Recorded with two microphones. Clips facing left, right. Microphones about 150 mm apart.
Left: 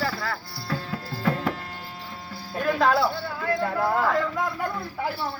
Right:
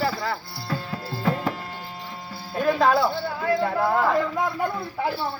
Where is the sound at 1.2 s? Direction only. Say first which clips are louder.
Right 1 dB; 5° right (ahead or behind).